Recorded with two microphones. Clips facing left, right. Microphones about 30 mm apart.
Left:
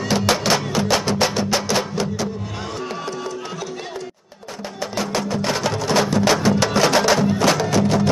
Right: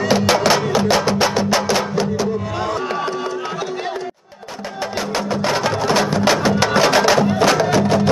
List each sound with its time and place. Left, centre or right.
0.0 s music: centre
4.9 s music: centre